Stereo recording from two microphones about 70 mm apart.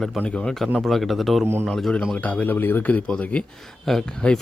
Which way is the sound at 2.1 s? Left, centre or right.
Left.